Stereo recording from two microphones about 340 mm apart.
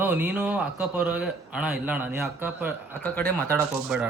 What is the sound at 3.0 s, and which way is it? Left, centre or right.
Speech, centre.